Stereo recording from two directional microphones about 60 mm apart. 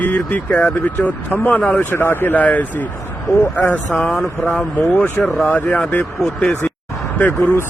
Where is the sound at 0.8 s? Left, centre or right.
Left.